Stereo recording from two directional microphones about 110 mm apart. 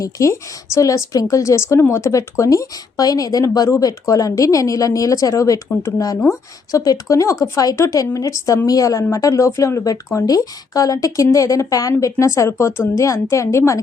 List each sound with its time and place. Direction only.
0.0 s speech: 30° left (ahead or behind)